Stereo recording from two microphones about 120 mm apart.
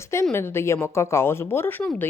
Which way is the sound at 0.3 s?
20° left (ahead or behind).